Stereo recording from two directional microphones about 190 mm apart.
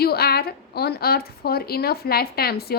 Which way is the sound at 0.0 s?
55° left (ahead or behind).